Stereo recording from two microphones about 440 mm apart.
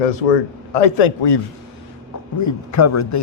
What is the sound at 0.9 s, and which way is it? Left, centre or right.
Speech, left.